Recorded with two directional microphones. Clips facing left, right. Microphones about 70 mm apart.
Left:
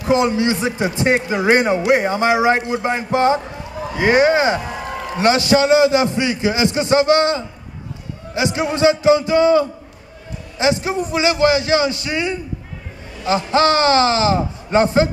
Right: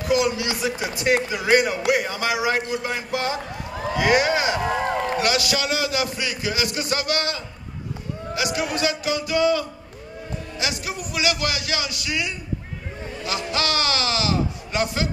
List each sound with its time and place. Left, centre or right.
0.0 s a man's voice: left